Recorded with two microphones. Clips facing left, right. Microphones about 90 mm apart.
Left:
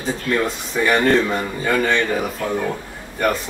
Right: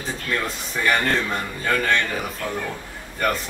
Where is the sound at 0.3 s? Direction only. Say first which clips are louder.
Left 5 dB; 10° left (ahead or behind).